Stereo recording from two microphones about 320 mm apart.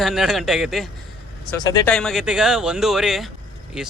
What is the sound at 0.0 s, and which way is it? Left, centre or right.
Speech, centre.